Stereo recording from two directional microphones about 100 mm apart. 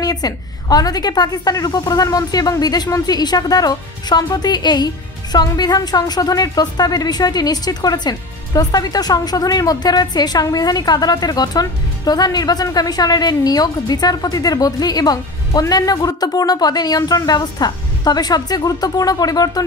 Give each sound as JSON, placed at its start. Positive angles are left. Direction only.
{"t": 0.0, "sound": "speech", "side_deg": 40}